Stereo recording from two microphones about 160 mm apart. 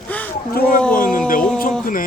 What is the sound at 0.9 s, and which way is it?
Speech, 60° left (ahead or behind).